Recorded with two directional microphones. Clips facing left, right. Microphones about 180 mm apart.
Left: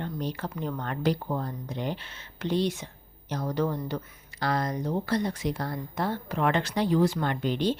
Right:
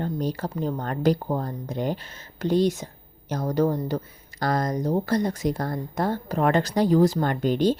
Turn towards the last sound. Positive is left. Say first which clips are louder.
# right 5 dB
turn(degrees=-45)  # may be behind; listen again after turning